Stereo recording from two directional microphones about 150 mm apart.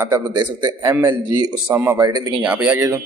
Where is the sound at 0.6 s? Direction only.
25° right (ahead or behind).